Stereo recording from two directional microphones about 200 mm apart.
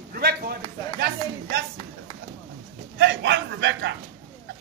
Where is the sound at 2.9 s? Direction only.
60° right (ahead or behind).